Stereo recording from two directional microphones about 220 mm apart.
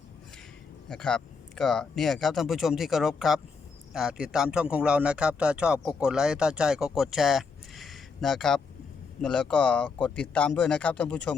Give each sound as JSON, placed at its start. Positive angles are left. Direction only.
{"t": 0.9, "sound": "a man's voice", "side_deg": 5}